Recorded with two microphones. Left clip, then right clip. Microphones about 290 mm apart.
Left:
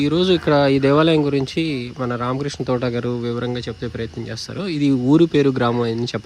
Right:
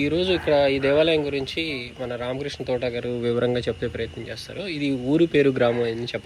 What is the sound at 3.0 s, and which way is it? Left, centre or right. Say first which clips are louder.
Speech: left 3 dB; centre.